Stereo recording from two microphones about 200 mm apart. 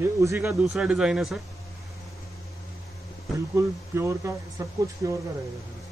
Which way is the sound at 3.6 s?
15° right (ahead or behind).